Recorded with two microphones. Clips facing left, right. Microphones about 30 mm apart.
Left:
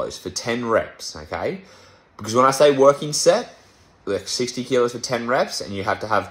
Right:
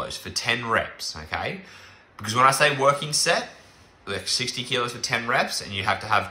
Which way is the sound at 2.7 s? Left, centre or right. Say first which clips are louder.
Left 6 dB; right.